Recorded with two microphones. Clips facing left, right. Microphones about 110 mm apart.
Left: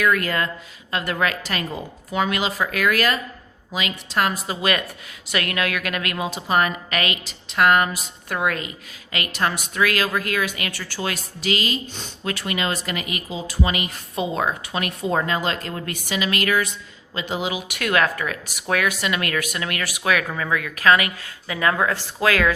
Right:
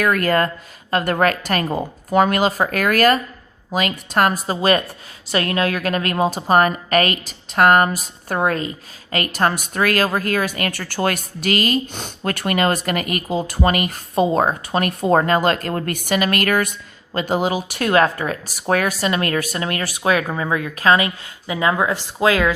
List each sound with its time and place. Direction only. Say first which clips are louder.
0.0 s a woman's voice: right 4 dB; 45° right (ahead or behind); by 22.5 s 20° right (ahead or behind)